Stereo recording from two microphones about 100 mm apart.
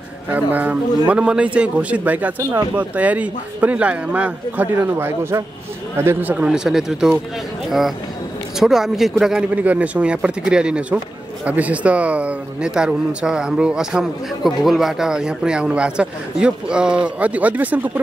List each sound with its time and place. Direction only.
0.3 s speech: 15° right (ahead or behind)
6.0 s speech: 15° right (ahead or behind)
8.5 s speech: 5° right (ahead or behind)
9.6 s speech: 15° right (ahead or behind)